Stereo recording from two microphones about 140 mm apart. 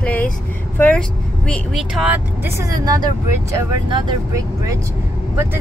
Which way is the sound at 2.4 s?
20° right (ahead or behind).